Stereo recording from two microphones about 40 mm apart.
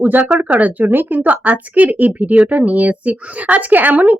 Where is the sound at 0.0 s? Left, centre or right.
Right.